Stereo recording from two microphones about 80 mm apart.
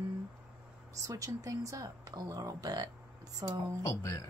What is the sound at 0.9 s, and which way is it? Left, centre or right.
Speech, right.